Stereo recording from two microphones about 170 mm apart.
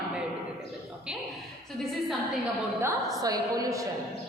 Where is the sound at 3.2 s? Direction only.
20° right (ahead or behind).